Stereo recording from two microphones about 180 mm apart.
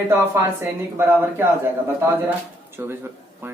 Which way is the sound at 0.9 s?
10° right (ahead or behind).